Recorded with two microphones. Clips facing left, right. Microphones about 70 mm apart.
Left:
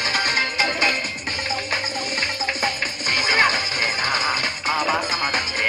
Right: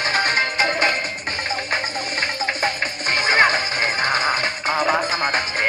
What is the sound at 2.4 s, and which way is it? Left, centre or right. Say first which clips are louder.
Music: right 3 dB; right.